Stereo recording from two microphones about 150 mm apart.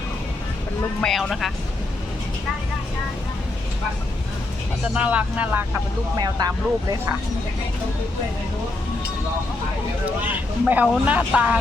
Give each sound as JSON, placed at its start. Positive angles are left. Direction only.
{"t": 1.0, "sound": "speech", "side_deg": 0}
{"t": 4.9, "sound": "speech", "side_deg": -10}
{"t": 6.1, "sound": "speech", "side_deg": -25}
{"t": 10.1, "sound": "speech", "side_deg": -10}